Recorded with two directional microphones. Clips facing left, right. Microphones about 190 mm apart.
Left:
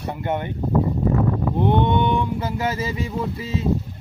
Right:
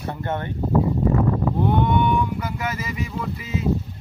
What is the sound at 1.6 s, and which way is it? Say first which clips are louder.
Speech: left 3 dB; 25° left (ahead or behind).